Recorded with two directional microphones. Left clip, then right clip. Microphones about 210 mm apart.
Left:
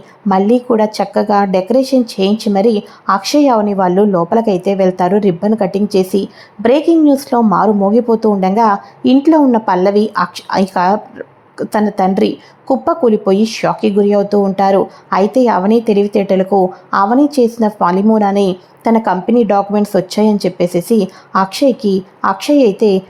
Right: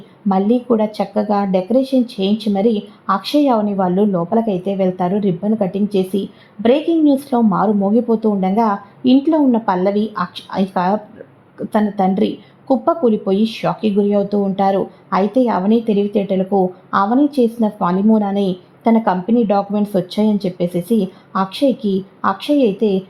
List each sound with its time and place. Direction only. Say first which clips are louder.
0.3 s a woman's voice: left 4 dB; 20° left (ahead or behind)